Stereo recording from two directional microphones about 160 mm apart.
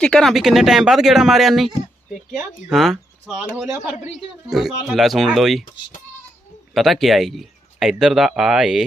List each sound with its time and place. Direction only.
0.0 s speech: 5° left (ahead or behind)
6.7 s speech: centre (ahead or behind)